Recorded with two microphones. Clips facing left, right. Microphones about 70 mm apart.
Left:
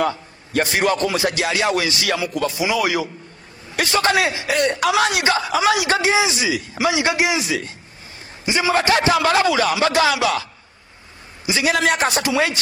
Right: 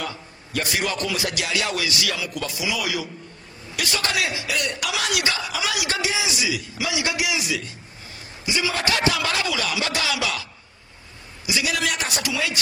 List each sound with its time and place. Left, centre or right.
0.0 s a man's voice: left
11.4 s a man's voice: left